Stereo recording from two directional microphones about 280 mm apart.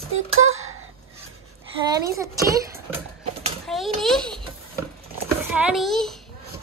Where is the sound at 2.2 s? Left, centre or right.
Centre.